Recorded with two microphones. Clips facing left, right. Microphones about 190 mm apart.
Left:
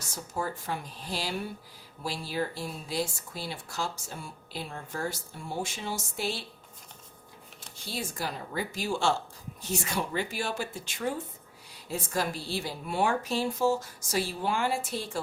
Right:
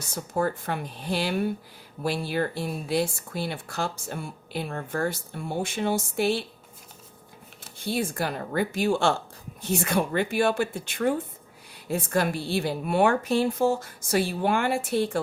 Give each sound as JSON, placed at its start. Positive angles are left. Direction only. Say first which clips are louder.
{"t": 0.3, "sound": "speech", "louder": "right 6 dB", "side_deg": -60}
{"t": 7.9, "sound": "speech", "louder": "right 8 dB", "side_deg": -60}